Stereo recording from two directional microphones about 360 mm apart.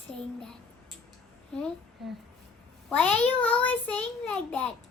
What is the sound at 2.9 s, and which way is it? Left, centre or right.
A woman's voice, centre.